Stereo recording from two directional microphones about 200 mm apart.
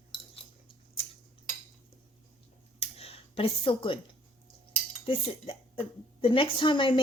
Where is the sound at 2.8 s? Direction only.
30° left (ahead or behind).